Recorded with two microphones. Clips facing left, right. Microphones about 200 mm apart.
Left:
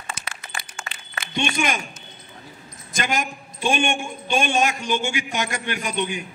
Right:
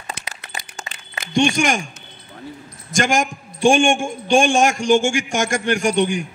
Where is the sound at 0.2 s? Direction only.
65° right (ahead or behind).